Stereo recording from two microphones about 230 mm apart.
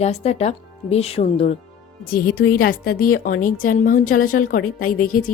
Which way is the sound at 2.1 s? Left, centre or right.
Left.